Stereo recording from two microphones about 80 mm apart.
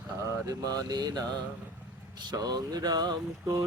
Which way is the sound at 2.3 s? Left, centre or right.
Right.